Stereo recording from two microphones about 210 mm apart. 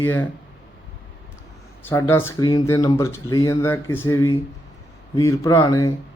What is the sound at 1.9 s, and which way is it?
Speech, 10° left (ahead or behind).